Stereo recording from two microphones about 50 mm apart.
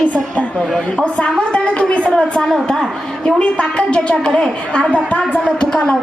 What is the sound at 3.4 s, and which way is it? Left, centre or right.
A woman's voice, left.